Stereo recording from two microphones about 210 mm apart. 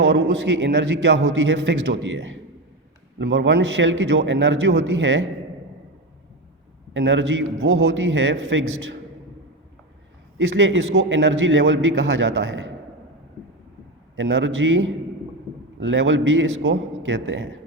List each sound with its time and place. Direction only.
0.0 s a man's voice: 55° right (ahead or behind)
6.9 s a man's voice: 60° right (ahead or behind)
10.3 s a man's voice: 60° right (ahead or behind)
14.2 s a man's voice: 60° right (ahead or behind)